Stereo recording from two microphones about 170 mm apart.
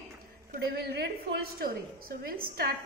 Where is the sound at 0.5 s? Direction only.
75° right (ahead or behind).